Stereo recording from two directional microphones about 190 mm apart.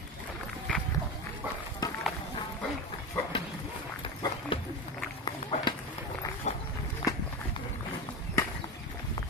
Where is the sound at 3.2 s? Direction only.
10° left (ahead or behind).